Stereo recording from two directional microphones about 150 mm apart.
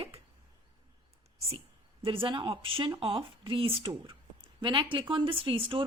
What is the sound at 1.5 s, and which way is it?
A woman's voice, 40° right (ahead or behind).